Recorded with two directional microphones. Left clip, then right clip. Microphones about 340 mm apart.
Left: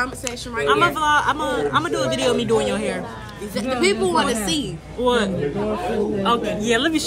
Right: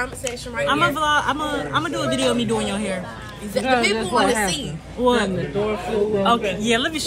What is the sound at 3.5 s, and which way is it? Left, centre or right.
A woman's voice, centre.